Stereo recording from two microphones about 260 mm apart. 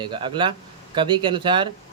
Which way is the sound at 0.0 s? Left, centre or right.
Centre.